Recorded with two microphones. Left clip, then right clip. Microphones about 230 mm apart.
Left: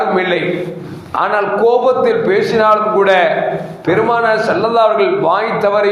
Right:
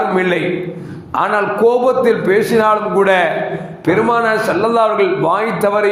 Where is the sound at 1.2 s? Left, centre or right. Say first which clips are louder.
Even; right.